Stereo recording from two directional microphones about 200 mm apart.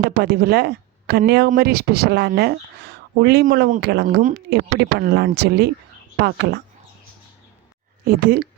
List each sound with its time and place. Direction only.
0.2 s speech: 50° right (ahead or behind)
8.0 s speech: 50° right (ahead or behind)